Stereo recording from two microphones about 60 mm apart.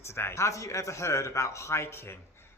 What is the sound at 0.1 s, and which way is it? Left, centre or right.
A man's voice, left.